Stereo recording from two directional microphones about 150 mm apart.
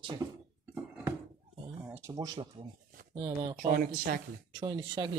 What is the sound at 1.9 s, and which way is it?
Speech, 15° right (ahead or behind).